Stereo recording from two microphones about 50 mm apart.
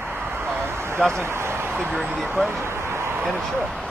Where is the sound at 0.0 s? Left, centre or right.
Right.